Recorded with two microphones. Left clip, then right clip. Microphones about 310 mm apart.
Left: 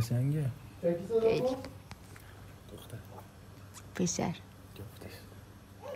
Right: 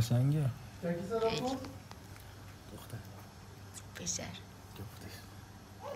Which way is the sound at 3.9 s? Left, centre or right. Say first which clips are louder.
Left 7 dB; centre.